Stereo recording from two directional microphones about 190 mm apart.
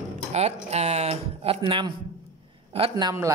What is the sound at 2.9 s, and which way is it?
Speech, 15° right (ahead or behind).